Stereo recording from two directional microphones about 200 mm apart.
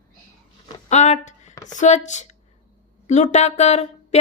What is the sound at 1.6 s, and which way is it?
A woman's voice, 40° left (ahead or behind).